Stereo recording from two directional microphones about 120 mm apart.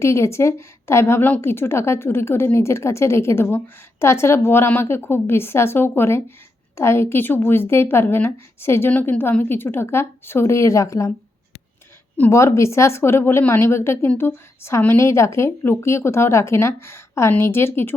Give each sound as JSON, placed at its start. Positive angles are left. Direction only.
{"t": 0.0, "sound": "a woman's voice", "side_deg": 25}
{"t": 12.3, "sound": "a woman's voice", "side_deg": 25}